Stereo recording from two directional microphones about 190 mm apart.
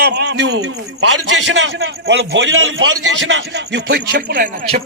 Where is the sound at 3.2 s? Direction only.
70° right (ahead or behind); by 4.6 s 45° right (ahead or behind).